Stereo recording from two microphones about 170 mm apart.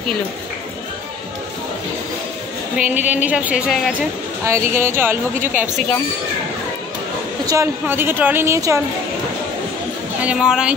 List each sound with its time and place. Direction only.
2.8 s a woman's voice: 10° right (ahead or behind)
4.5 s a woman's voice: 15° right (ahead or behind)
7.4 s a woman's voice: 15° right (ahead or behind)
10.2 s speech: 5° right (ahead or behind)